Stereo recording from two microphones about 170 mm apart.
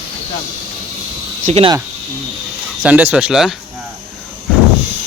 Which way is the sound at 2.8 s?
10° right (ahead or behind).